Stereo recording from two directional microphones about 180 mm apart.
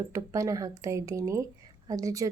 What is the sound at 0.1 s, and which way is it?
A woman's voice, 15° right (ahead or behind).